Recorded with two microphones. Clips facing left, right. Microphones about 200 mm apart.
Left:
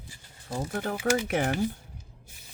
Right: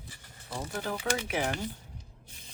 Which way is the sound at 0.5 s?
55° left (ahead or behind).